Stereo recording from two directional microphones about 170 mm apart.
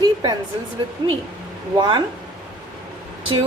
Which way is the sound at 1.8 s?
25° right (ahead or behind).